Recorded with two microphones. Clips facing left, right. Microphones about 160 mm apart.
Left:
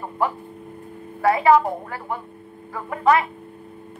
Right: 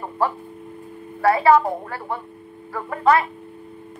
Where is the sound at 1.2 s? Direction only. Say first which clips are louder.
Right 1 dB; 15° left (ahead or behind).